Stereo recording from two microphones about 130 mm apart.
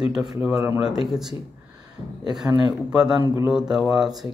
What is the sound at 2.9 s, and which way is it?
Speech, 5° right (ahead or behind).